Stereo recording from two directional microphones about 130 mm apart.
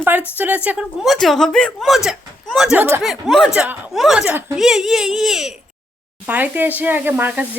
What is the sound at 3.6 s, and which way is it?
Speech, 15° right (ahead or behind).